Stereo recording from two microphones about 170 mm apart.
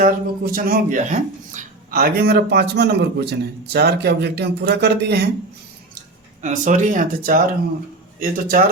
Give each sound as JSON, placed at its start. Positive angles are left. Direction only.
{"t": 0.0, "sound": "speech", "side_deg": -55}
{"t": 6.4, "sound": "speech", "side_deg": -45}